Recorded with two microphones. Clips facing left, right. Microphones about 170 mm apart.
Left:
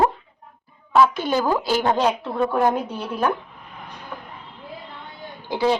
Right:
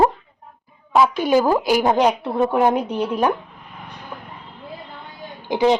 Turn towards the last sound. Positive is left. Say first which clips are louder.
# right 4 dB
turn(degrees=-20)  # may be behind; listen again after turning